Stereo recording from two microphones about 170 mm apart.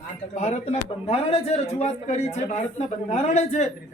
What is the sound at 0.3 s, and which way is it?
A man's voice, 40° left (ahead or behind).